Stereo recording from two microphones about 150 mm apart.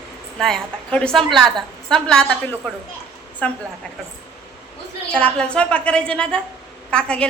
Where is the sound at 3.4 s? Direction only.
10° left (ahead or behind).